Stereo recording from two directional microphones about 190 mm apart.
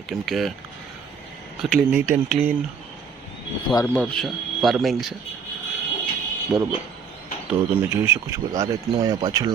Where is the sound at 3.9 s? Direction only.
Centre (ahead or behind).